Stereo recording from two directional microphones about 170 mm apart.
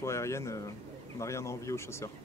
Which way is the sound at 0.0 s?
15° left (ahead or behind).